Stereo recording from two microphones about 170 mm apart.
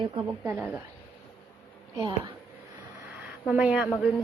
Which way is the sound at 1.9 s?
25° right (ahead or behind).